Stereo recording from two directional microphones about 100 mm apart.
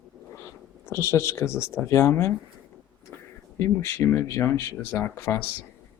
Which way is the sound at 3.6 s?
25° left (ahead or behind).